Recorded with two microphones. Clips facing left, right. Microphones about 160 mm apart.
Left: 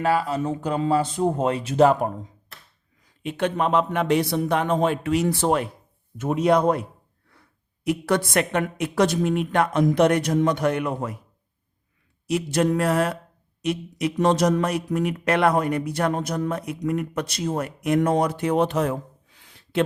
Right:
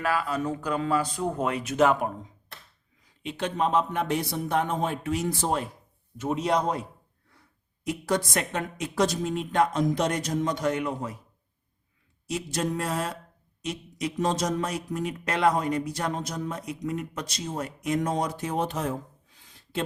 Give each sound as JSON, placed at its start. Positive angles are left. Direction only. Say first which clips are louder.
{"t": 0.0, "sound": "speech", "louder": "left 5 dB", "side_deg": 30}
{"t": 3.2, "sound": "speech", "louder": "left 4 dB", "side_deg": 60}
{"t": 6.1, "sound": "speech", "louder": "left 6 dB", "side_deg": 55}
{"t": 7.9, "sound": "speech", "louder": "left 5 dB", "side_deg": 65}
{"t": 12.3, "sound": "speech", "louder": "left 8 dB", "side_deg": 65}